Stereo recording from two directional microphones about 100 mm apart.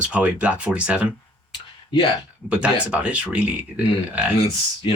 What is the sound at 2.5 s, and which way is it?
Speech, 10° right (ahead or behind).